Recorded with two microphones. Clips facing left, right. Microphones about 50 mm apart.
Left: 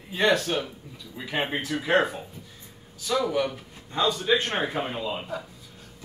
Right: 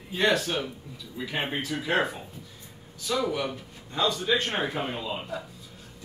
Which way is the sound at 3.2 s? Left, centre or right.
Centre.